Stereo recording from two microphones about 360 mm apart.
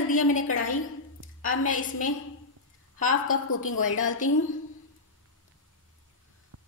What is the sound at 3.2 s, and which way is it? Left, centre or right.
Speech, left.